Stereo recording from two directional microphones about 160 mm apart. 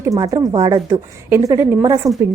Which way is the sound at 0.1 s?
25° right (ahead or behind).